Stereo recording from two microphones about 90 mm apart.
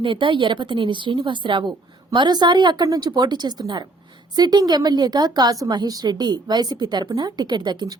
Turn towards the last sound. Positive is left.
turn(degrees=-55)  # may be behind; listen again after turning